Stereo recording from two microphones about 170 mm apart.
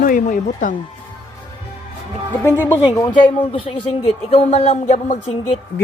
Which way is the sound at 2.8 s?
25° left (ahead or behind).